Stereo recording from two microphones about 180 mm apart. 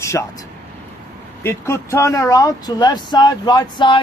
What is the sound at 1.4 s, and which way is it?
Speech, 15° left (ahead or behind).